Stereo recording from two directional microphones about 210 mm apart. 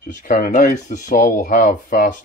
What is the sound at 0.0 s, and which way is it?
Speech, 40° left (ahead or behind).